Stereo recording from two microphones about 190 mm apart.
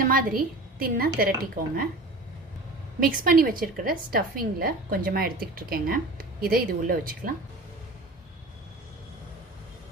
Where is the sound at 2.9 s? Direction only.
50° right (ahead or behind).